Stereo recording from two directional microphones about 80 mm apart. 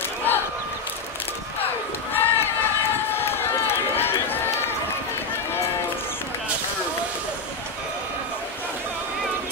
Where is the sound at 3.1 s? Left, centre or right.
Left.